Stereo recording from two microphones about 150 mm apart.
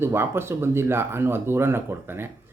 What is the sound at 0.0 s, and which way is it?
Speech, 15° right (ahead or behind).